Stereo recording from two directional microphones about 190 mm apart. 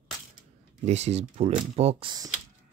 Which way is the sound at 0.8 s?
35° right (ahead or behind).